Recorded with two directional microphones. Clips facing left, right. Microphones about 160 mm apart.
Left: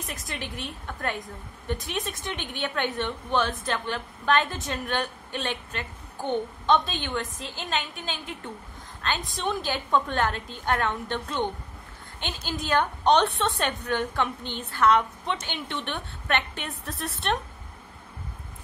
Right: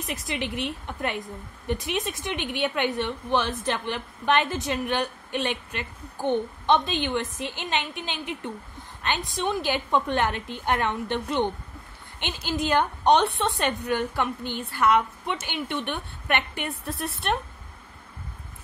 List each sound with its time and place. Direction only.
0.4 s a woman's voice: 15° right (ahead or behind)